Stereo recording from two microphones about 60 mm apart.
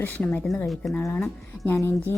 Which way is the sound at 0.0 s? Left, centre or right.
Left.